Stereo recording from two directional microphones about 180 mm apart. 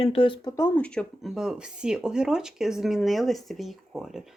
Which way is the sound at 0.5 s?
10° left (ahead or behind).